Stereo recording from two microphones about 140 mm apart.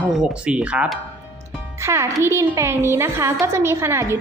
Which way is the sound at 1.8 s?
20° right (ahead or behind).